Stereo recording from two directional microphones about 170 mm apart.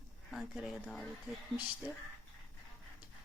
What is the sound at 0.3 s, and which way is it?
Speech, centre (ahead or behind).